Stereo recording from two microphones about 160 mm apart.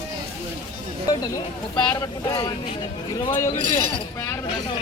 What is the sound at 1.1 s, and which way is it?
Speech, 25° left (ahead or behind).